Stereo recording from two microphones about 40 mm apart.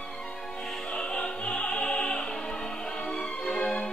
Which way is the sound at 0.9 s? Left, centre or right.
Left.